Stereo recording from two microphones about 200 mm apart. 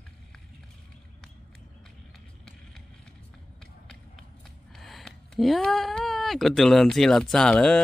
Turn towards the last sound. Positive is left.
turn(degrees=5)  # may be behind; listen again after turning